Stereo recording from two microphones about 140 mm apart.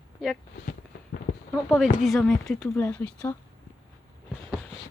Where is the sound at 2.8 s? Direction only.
15° left (ahead or behind).